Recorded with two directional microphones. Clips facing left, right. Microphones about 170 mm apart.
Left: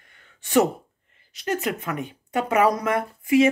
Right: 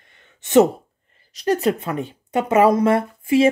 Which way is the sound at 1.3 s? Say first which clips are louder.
Right 7 dB; 35° right (ahead or behind).